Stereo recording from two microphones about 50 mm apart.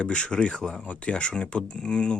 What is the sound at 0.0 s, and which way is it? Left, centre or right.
Speech, left.